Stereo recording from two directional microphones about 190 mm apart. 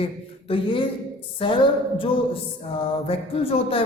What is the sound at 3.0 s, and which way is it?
Speech, 30° left (ahead or behind).